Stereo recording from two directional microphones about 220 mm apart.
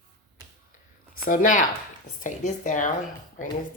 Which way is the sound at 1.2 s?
35° left (ahead or behind).